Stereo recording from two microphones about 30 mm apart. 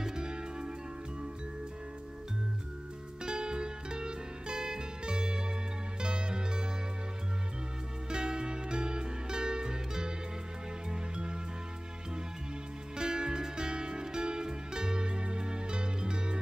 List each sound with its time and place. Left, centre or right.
0.0 s music: right
3.3 s music: right
8.1 s music: right
12.9 s music: right